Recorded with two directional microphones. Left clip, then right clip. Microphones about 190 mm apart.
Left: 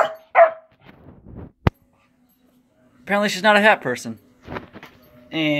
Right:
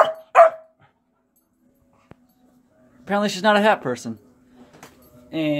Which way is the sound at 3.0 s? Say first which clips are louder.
Left 2 dB; 5° right (ahead or behind).